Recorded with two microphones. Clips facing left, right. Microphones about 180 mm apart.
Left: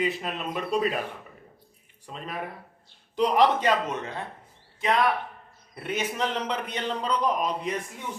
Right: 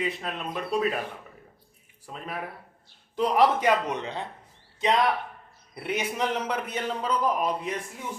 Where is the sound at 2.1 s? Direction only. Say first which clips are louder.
Left 1 dB; 5° right (ahead or behind).